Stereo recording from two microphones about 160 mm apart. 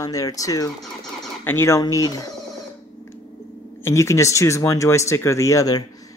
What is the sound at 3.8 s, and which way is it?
Speech, 20° left (ahead or behind).